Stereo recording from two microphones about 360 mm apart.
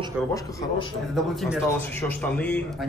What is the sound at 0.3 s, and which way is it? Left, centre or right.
A man's voice, centre.